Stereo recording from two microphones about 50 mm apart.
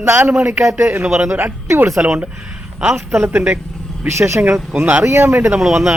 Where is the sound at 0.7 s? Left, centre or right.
Right.